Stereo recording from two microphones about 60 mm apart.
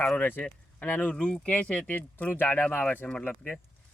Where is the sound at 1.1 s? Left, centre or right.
Centre.